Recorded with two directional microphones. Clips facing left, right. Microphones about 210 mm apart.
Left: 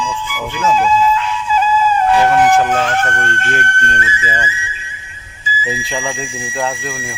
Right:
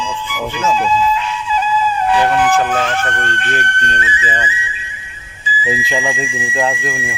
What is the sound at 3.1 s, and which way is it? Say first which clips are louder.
Speech: left 1 dB; 45° left (ahead or behind).